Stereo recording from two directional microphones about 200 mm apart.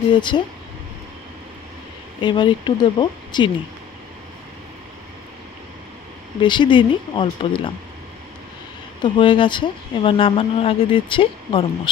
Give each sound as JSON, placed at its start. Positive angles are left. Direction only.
{"t": 0.1, "sound": "speech", "side_deg": 25}
{"t": 2.2, "sound": "speech", "side_deg": 25}
{"t": 6.4, "sound": "speech", "side_deg": 25}
{"t": 9.0, "sound": "speech", "side_deg": 25}